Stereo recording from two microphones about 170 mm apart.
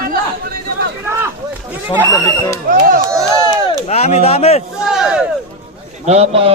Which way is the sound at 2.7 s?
55° right (ahead or behind).